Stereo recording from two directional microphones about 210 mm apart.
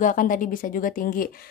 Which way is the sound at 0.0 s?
40° left (ahead or behind).